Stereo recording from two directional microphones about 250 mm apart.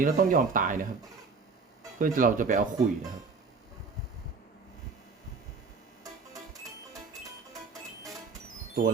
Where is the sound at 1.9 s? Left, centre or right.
Right.